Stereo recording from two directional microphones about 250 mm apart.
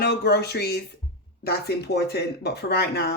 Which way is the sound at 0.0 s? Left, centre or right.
Left.